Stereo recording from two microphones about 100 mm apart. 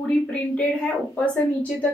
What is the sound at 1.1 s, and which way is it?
Speech, 15° left (ahead or behind).